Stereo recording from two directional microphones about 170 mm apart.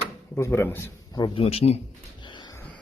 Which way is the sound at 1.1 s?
30° left (ahead or behind).